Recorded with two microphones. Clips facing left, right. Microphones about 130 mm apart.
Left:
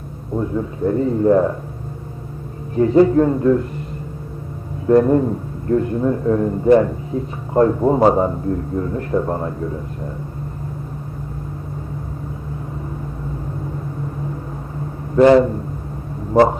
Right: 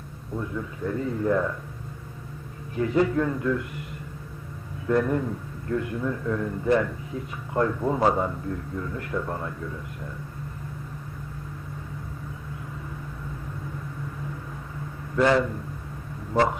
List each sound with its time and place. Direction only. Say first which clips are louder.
0.3 s a man's voice: left 10 dB; 35° left (ahead or behind)
2.7 s a man's voice: left 10 dB; 35° left (ahead or behind)
4.9 s a man's voice: left 10 dB; 35° left (ahead or behind)
15.1 s a man's voice: left 10 dB; 35° left (ahead or behind)
16.3 s vehicle: left 9 dB; 45° left (ahead or behind)